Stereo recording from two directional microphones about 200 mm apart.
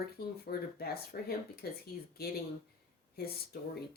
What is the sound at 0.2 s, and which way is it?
Speech, 50° left (ahead or behind).